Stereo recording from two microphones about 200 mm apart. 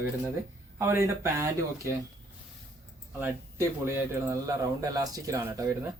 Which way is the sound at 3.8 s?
15° right (ahead or behind).